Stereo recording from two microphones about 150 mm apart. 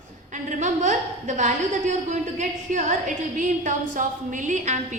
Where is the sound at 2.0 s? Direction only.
55° right (ahead or behind).